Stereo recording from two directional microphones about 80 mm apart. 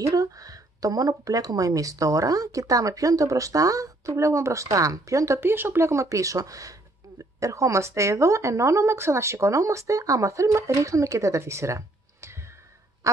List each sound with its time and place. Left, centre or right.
0.0 s speech: right
5.4 s speech: right
13.0 s goose: right